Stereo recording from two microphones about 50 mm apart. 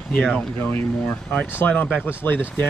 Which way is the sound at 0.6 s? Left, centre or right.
Left.